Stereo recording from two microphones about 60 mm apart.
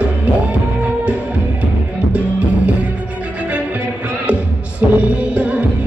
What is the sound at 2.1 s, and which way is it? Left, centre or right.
Music, right.